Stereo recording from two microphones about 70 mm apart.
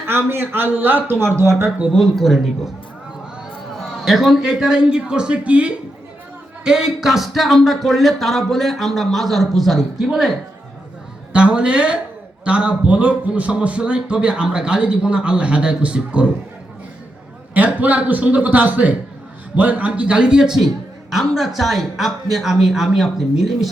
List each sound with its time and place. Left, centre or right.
0.0 s speech: right
1.9 s speech: centre
3.8 s a man's voice: centre
11.3 s a man's voice: centre
17.5 s a man's voice: right; by 23.6 s centre